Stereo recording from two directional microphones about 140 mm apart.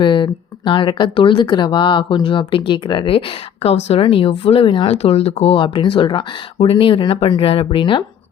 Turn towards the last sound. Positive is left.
turn(degrees=35)  # may be behind; listen again after turning